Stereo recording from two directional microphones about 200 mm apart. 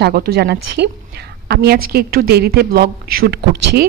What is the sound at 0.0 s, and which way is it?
A man's voice, 50° right (ahead or behind).